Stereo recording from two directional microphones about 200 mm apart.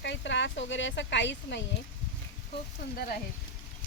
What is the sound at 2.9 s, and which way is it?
Speech, 50° left (ahead or behind).